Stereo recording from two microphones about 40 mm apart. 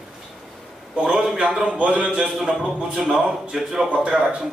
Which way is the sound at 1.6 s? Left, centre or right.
Right.